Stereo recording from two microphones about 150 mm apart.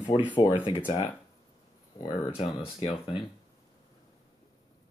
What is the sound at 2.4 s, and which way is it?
Speech, 40° left (ahead or behind).